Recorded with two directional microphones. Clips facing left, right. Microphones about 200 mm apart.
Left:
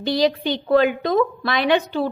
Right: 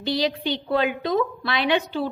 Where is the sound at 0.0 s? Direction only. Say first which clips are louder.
Left 5 dB; 45° left (ahead or behind).